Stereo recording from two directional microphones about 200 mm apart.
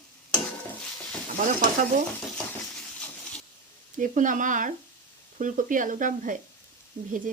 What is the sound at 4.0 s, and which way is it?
Speech, 40° right (ahead or behind).